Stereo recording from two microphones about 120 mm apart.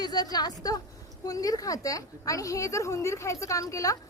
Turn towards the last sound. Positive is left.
turn(degrees=30)  # may be behind; listen again after turning